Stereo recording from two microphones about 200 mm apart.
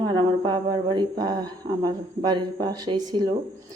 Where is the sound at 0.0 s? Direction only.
25° right (ahead or behind).